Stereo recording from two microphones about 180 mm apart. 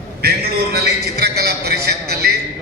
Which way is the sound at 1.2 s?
65° right (ahead or behind).